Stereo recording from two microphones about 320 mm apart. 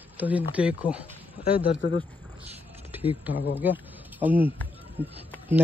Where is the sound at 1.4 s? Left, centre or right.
Left.